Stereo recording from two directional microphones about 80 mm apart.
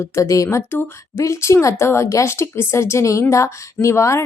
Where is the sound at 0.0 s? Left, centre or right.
Left.